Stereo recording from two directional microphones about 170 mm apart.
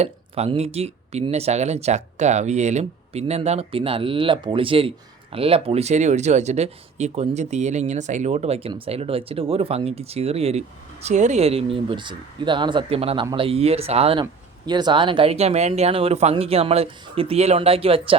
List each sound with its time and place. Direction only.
0.0 s speech: 40° right (ahead or behind)